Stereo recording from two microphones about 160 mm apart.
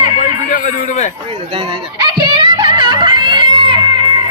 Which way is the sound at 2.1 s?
35° right (ahead or behind).